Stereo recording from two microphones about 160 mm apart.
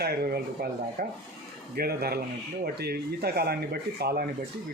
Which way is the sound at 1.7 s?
70° right (ahead or behind).